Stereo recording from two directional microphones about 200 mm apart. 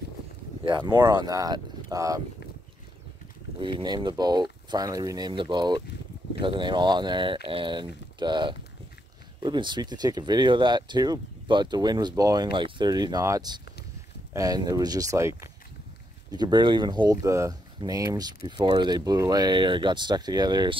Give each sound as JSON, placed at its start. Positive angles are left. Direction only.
{"t": 0.7, "sound": "speech", "side_deg": -20}
{"t": 3.5, "sound": "speech", "side_deg": -25}